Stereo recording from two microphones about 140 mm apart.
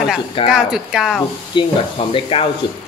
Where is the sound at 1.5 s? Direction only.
35° left (ahead or behind).